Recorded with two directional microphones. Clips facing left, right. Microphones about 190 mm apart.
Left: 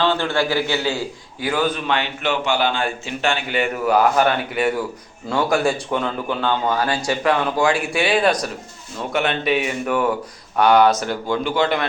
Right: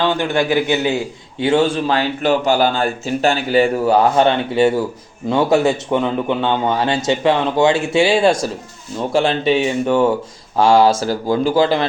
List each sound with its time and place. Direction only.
0.0 s a man's voice: 15° right (ahead or behind)